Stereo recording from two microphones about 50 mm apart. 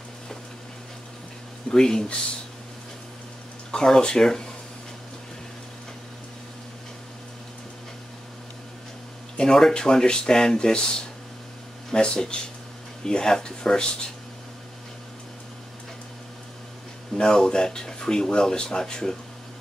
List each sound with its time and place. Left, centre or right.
1.7 s speech: centre
3.7 s speech: centre
9.4 s speech: centre
17.1 s speech: centre